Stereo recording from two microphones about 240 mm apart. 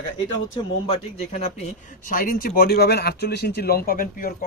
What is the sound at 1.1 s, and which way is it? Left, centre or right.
Speech, left.